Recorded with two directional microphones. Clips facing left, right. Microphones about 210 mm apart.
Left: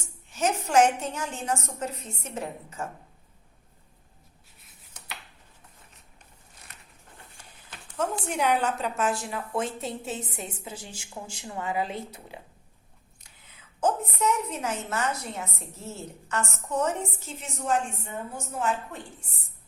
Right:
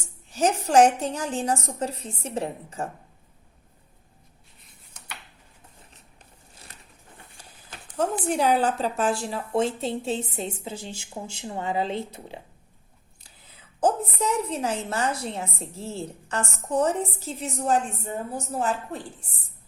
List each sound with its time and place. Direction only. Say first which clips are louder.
0.3 s a woman's voice: right 4 dB; 35° right (ahead or behind)
6.7 s a sound: even; 30° right (ahead or behind)
7.9 s a woman's voice: right 4 dB; 35° right (ahead or behind)